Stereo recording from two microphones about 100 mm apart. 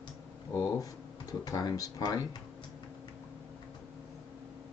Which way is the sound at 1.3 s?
40° left (ahead or behind).